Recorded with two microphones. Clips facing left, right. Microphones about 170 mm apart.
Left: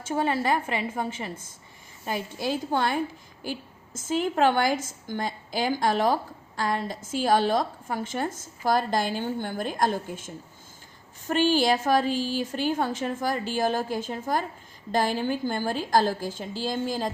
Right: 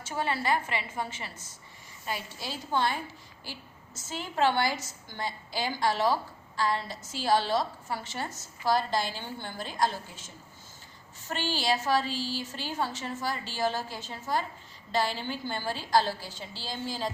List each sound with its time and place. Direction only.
0.0 s a woman's voice: 45° left (ahead or behind)
4.2 s a woman's voice: 50° left (ahead or behind)